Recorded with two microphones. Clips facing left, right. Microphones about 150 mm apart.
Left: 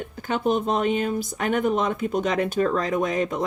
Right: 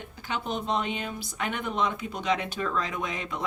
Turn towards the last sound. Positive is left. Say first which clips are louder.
# left 10 dB
turn(degrees=45)  # may be behind; listen again after turning